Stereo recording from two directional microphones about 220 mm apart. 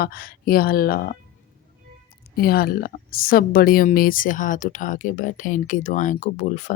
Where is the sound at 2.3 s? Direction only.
45° left (ahead or behind).